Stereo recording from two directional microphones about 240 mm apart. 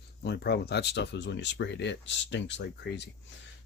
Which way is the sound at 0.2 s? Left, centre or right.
Left.